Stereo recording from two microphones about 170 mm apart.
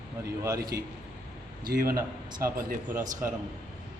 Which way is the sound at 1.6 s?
60° right (ahead or behind).